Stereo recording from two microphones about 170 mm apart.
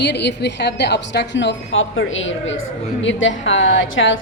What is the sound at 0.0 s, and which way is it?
A woman's voice, 90° left.